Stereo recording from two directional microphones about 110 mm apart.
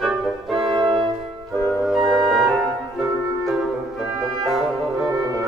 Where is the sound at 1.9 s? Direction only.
Centre (ahead or behind).